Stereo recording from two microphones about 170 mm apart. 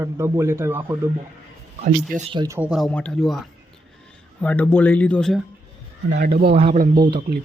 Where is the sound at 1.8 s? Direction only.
45° right (ahead or behind).